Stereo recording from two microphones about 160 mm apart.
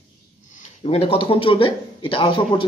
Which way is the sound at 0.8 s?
35° left (ahead or behind).